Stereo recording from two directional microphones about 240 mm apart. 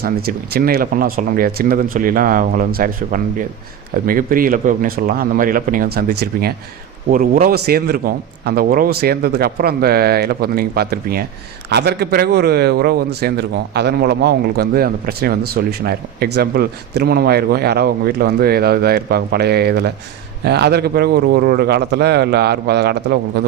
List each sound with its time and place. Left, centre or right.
0.0 s a man's voice: right